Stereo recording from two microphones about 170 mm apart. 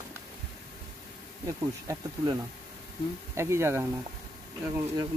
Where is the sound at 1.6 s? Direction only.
20° right (ahead or behind).